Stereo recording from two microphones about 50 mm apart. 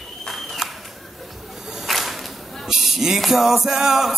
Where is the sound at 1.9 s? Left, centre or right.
Centre.